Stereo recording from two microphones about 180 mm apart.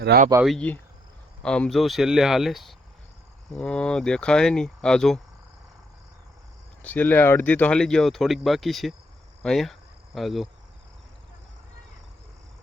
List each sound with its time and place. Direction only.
0.1 s speech: 65° right (ahead or behind)
0.4 s speech: 5° left (ahead or behind)
6.8 s speech: 10° left (ahead or behind)